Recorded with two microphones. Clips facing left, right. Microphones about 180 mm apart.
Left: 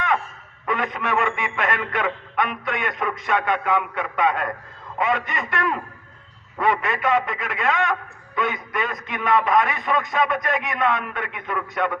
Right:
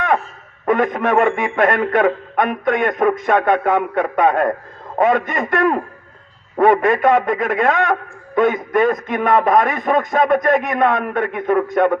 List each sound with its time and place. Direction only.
0.6 s a man's voice: 50° right (ahead or behind)